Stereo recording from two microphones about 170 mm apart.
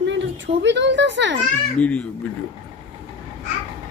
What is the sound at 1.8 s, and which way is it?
Speech, 10° left (ahead or behind).